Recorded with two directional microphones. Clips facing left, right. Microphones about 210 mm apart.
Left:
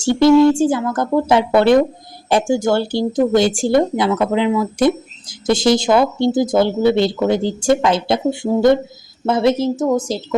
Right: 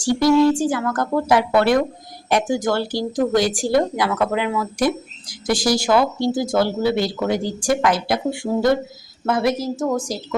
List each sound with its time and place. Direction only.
0.0 s speech: 25° left (ahead or behind)